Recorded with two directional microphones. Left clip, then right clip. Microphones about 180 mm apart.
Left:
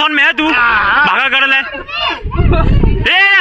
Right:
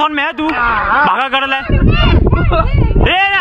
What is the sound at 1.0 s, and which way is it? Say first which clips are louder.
Speech: left 2 dB; 10° right (ahead or behind).